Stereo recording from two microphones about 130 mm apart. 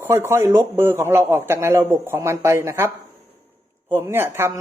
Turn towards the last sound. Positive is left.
turn(degrees=-20)  # may be behind; listen again after turning